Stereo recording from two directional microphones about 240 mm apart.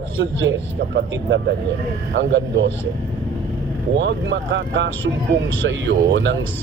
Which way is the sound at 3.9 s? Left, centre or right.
Right.